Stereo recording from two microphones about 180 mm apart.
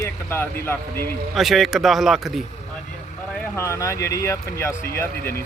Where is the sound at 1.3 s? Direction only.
Centre (ahead or behind).